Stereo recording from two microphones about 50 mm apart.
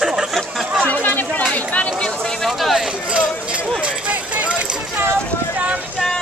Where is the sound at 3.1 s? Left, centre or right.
Right.